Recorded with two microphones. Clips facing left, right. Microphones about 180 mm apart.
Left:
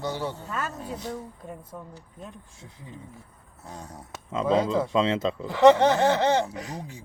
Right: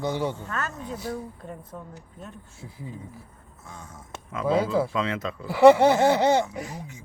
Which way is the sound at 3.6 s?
35° left (ahead or behind).